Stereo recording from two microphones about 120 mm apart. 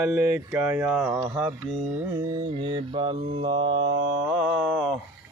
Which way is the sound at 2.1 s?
30° right (ahead or behind).